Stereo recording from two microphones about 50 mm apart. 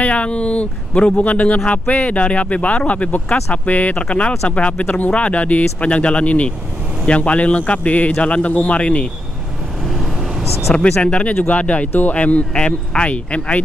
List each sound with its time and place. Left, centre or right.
0.0 s speech: left
10.7 s speech: left